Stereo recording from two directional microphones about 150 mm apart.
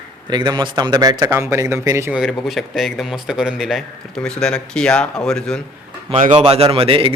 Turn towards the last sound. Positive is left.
turn(degrees=-40)  # may be behind; listen again after turning